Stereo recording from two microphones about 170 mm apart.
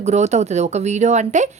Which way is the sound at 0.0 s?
40° right (ahead or behind).